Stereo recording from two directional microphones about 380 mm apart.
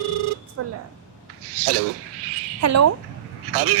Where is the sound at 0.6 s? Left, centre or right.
Right.